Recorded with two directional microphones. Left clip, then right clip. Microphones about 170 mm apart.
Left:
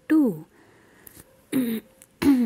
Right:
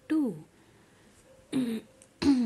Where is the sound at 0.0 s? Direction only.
40° left (ahead or behind).